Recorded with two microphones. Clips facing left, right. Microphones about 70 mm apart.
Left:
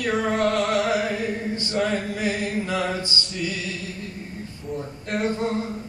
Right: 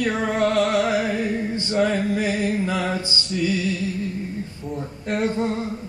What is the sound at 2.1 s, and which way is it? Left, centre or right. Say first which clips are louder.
Music: right 3 dB; centre.